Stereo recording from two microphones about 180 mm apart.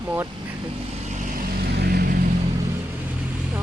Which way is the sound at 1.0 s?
45° right (ahead or behind).